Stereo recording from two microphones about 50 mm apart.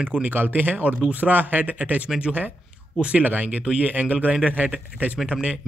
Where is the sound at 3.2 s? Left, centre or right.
Right.